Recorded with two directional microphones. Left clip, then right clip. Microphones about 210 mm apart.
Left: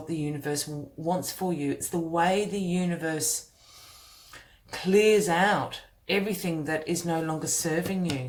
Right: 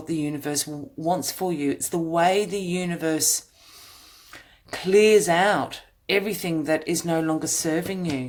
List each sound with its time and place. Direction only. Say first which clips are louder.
0.2 s speech: right 4 dB; 45° right (ahead or behind)